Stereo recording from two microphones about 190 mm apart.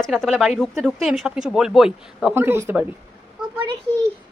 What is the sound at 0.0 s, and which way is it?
Speech, centre (ahead or behind).